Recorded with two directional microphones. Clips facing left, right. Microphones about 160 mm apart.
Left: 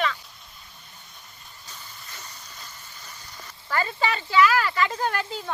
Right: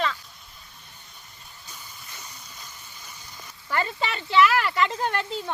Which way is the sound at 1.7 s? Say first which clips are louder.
Left 1 dB; 10° right (ahead or behind).